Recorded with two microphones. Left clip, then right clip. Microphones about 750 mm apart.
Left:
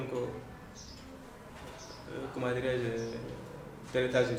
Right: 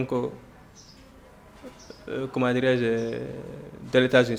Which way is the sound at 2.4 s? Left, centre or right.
Right.